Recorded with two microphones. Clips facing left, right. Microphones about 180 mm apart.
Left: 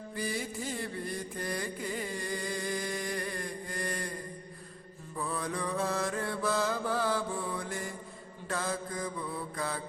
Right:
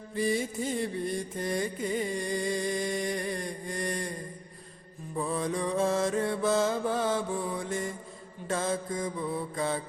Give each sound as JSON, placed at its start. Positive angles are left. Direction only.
{"t": 0.2, "sound": "mantra", "side_deg": -25}
{"t": 5.1, "sound": "mantra", "side_deg": -25}